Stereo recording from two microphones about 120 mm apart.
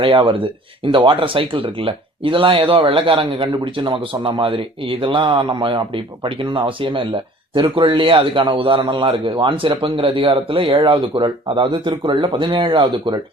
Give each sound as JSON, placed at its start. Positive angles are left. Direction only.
{"t": 0.0, "sound": "speech", "side_deg": -45}